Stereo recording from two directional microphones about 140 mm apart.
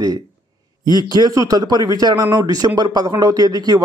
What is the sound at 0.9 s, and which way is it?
Speech, 30° right (ahead or behind).